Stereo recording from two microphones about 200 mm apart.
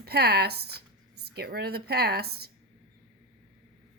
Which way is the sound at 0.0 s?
50° right (ahead or behind).